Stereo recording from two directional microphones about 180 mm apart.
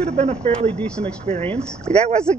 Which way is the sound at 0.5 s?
5° left (ahead or behind).